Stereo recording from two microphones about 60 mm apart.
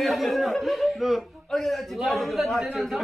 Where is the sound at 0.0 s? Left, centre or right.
Centre.